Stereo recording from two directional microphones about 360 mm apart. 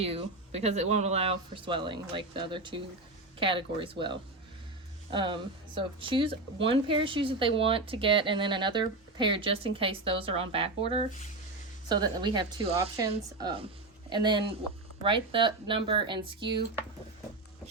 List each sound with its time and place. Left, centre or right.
0.0 s speech: centre